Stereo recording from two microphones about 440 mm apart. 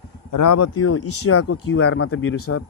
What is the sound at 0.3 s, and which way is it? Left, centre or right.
Speech, left.